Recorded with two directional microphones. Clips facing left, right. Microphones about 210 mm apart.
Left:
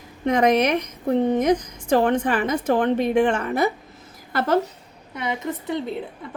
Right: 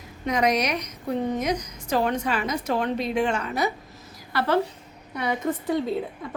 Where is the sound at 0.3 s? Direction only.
55° left (ahead or behind).